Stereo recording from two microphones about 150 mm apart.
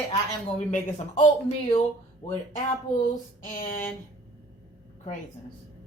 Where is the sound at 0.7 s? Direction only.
55° left (ahead or behind).